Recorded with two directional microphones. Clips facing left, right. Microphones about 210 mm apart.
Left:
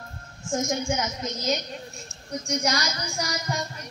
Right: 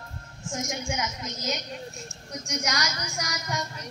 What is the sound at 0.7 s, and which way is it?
Child singing, 40° left (ahead or behind).